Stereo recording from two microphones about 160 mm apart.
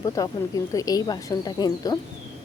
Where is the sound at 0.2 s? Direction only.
20° left (ahead or behind).